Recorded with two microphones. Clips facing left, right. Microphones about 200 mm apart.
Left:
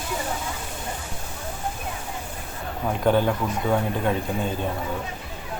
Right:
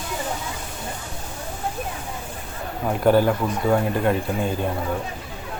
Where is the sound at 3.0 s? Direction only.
5° right (ahead or behind).